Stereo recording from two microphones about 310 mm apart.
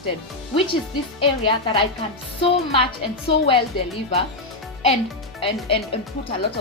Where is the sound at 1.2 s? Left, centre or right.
Centre.